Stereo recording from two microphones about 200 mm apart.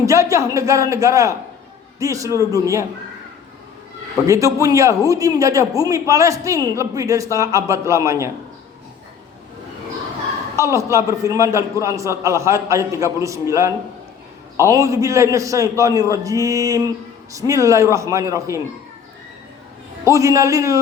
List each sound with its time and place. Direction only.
0.0 s a woman's voice: 15° right (ahead or behind)
4.3 s a woman's voice: 15° right (ahead or behind)
10.6 s a woman's voice: 15° right (ahead or behind)
20.1 s a woman's voice: 15° right (ahead or behind)